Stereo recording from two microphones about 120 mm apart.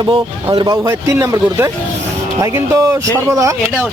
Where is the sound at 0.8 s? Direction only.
20° right (ahead or behind).